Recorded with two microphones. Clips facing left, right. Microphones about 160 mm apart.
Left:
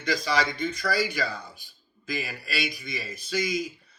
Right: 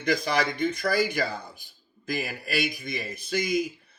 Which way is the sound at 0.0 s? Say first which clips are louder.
Right 1 dB; 55° right (ahead or behind).